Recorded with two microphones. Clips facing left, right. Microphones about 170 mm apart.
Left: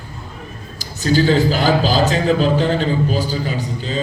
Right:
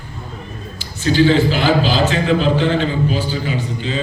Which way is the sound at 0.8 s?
40° left (ahead or behind).